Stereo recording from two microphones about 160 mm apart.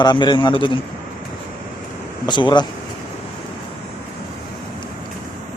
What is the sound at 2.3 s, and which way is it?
Speech, 30° left (ahead or behind).